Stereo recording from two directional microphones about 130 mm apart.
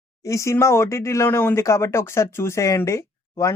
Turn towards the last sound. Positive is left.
turn(degrees=20)  # may be behind; listen again after turning